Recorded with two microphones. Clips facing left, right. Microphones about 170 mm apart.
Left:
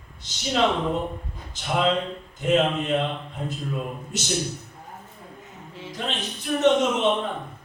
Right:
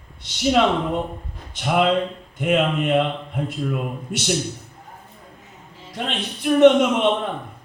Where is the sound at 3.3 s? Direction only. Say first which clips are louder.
Right 5 dB; 60° right (ahead or behind).